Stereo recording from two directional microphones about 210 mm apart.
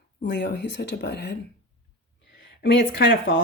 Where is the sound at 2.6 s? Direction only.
50° left (ahead or behind).